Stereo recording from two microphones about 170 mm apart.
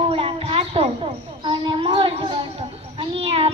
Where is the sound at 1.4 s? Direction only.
30° right (ahead or behind).